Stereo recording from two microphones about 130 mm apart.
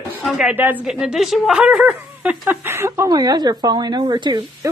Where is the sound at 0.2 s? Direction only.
5° right (ahead or behind); by 4.5 s 35° right (ahead or behind).